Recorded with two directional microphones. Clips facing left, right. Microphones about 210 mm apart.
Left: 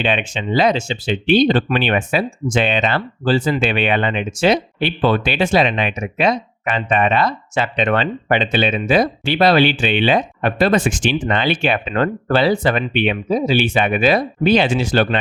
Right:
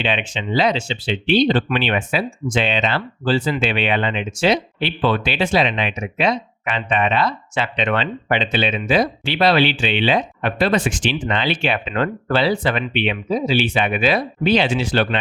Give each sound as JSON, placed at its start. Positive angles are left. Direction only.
{"t": 0.0, "sound": "speech", "side_deg": 50}